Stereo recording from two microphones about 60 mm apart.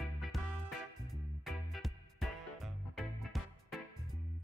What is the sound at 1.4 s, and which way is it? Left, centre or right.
Music, centre.